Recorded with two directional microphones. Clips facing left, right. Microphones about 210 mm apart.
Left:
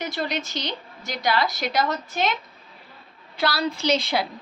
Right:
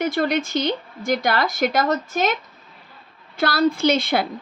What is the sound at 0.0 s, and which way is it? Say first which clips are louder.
A woman's voice: right 7 dB; 55° right (ahead or behind).